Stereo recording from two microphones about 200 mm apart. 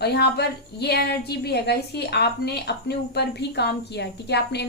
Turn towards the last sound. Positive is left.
turn(degrees=55)  # may be behind; listen again after turning